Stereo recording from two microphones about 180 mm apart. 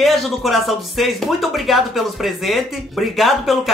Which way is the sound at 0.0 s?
Centre (ahead or behind).